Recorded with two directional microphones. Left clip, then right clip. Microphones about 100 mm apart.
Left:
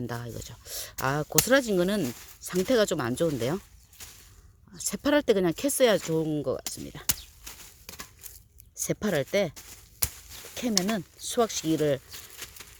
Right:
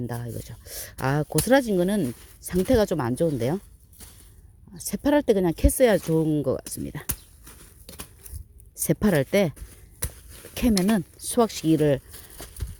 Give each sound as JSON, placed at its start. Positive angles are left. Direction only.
{"t": 0.3, "sound": "speech", "side_deg": -15}
{"t": 1.7, "sound": "speech", "side_deg": -5}
{"t": 2.6, "sound": "speech", "side_deg": -15}
{"t": 4.8, "sound": "speech", "side_deg": -10}
{"t": 6.1, "sound": "speech", "side_deg": -30}
{"t": 8.7, "sound": "speech", "side_deg": -45}
{"t": 12.1, "sound": "a sound", "side_deg": -10}